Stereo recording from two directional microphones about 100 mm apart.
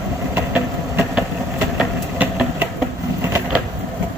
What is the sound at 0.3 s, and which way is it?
Train, 20° right (ahead or behind).